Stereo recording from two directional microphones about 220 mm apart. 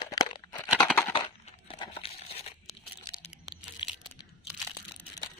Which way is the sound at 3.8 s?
20° left (ahead or behind).